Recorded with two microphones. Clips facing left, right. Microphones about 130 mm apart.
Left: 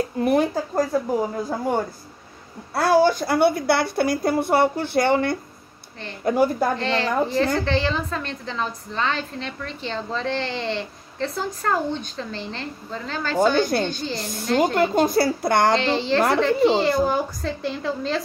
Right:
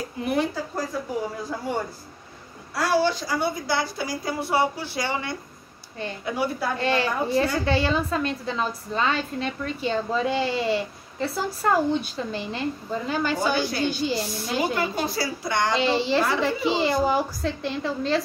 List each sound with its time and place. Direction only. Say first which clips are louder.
0.2 s speech: left 4 dB; 45° left (ahead or behind)
2.7 s a woman's voice: left 5 dB; 50° left (ahead or behind)
6.8 s a woman's voice: left 2 dB; 10° right (ahead or behind)
14.6 s a woman's voice: left 7 dB; 55° left (ahead or behind)
15.7 s a woman's voice: left 1 dB; 5° right (ahead or behind)